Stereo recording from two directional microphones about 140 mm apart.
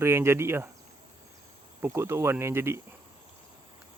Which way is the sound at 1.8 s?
20° right (ahead or behind).